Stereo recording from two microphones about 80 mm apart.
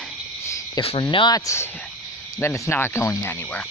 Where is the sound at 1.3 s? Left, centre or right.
Left.